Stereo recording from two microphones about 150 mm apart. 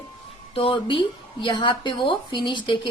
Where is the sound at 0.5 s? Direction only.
35° left (ahead or behind).